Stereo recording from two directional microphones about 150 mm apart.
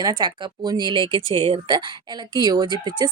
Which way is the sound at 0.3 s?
30° right (ahead or behind).